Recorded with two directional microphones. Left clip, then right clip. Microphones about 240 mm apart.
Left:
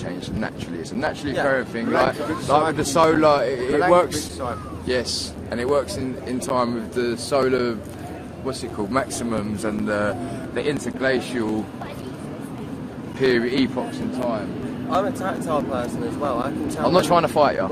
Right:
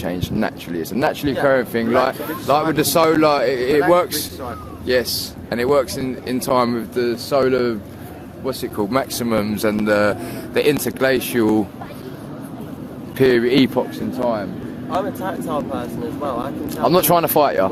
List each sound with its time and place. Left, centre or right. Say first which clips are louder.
0.0 s speech: right 6 dB; right
4.9 s speech: right 5 dB; right
8.4 s speech: right 5 dB; right
13.2 s speech: right 5 dB; right
14.8 s speech: even; centre
16.9 s speech: right 2 dB; right